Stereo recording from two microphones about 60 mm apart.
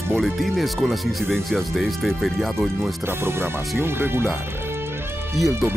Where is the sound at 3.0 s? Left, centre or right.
Right.